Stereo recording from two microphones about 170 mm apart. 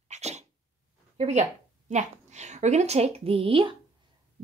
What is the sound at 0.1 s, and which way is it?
Sneeze, 40° right (ahead or behind).